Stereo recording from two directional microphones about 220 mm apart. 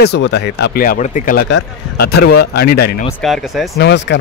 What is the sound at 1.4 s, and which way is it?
Speech, 50° left (ahead or behind).